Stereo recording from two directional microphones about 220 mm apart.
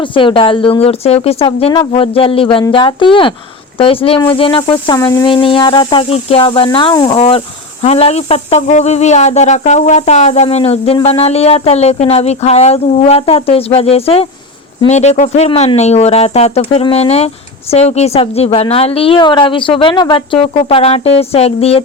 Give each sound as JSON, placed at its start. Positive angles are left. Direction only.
{"t": 0.0, "sound": "speech", "side_deg": 20}